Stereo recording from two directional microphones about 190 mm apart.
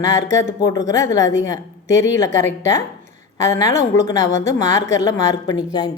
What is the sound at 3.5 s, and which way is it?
Speech, 15° left (ahead or behind).